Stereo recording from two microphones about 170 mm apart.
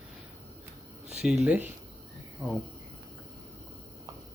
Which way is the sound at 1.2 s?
5° right (ahead or behind).